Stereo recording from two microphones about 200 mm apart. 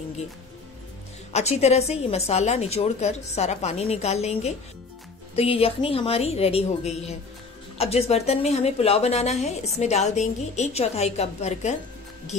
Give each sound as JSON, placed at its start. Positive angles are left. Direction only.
{"t": 1.3, "sound": "a woman's voice", "side_deg": 30}